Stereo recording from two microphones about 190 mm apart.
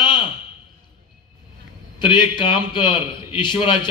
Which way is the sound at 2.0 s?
25° left (ahead or behind).